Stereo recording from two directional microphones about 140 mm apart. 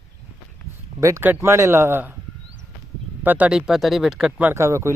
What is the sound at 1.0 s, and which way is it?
Speech, 20° right (ahead or behind).